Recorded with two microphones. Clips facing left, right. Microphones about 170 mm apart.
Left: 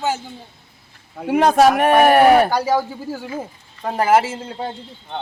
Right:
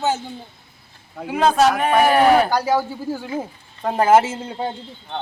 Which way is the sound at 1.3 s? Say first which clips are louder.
Left 3 dB; 60° left (ahead or behind).